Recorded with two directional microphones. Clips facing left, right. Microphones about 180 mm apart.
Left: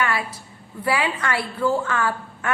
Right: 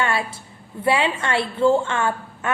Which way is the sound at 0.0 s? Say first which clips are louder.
Right 1 dB; 25° right (ahead or behind).